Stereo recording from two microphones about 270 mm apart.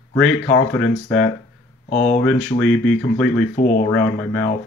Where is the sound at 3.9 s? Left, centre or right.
Centre.